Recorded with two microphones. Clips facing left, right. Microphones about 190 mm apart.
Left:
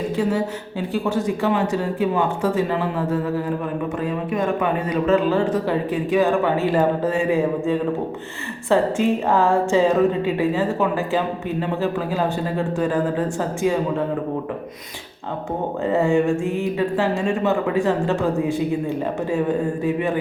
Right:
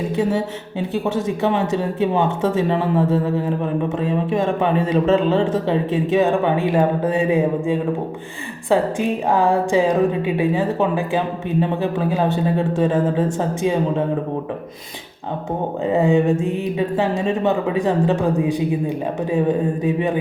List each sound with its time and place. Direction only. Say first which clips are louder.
0.2 s speech: right 2 dB; 25° right (ahead or behind)
15.9 s speech: right 2 dB; 15° right (ahead or behind)